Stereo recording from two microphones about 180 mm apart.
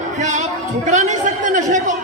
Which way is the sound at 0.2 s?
40° right (ahead or behind).